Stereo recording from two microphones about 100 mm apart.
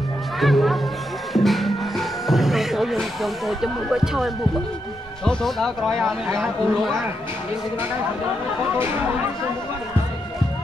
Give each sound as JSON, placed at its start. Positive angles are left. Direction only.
{"t": 0.4, "sound": "music", "side_deg": 0}
{"t": 5.2, "sound": "speech", "side_deg": 5}
{"t": 8.7, "sound": "speech", "side_deg": -20}